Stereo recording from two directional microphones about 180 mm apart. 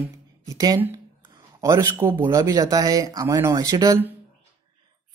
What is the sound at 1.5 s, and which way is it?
Speech, 15° right (ahead or behind).